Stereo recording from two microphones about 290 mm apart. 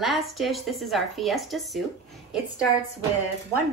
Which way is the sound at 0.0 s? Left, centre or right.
Centre.